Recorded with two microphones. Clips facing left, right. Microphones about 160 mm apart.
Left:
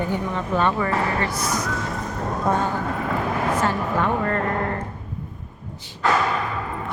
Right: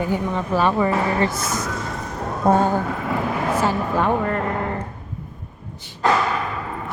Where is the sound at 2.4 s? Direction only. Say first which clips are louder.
Right 6 dB; 30° right (ahead or behind).